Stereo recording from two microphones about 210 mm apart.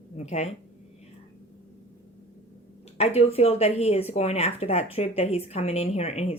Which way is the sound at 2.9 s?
30° left (ahead or behind).